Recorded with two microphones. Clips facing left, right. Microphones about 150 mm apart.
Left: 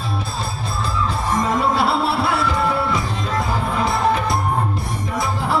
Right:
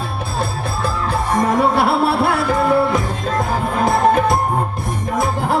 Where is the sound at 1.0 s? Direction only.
60° right (ahead or behind).